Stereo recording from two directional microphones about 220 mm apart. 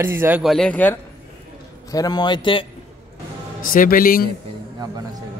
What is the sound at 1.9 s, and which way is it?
Speech, 15° left (ahead or behind).